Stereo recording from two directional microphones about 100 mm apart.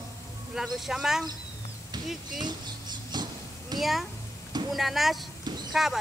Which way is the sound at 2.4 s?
45° right (ahead or behind).